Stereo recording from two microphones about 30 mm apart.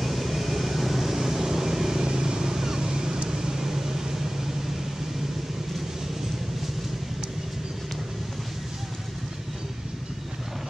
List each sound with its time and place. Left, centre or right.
0.0 s vehicle: centre